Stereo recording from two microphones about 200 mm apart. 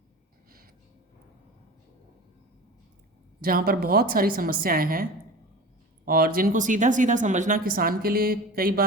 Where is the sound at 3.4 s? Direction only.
45° right (ahead or behind).